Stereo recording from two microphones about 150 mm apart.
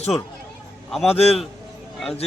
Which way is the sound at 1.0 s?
45° left (ahead or behind).